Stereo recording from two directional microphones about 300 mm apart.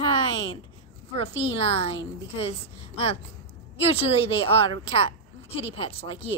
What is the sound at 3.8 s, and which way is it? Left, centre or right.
A child's voice, centre.